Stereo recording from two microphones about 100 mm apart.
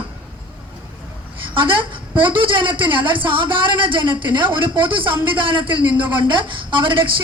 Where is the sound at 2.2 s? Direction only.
55° right (ahead or behind).